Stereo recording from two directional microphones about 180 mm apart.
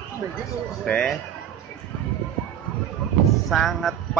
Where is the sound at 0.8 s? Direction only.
5° left (ahead or behind).